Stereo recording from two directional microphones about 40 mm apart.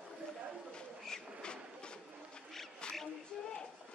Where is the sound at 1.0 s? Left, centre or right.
Centre.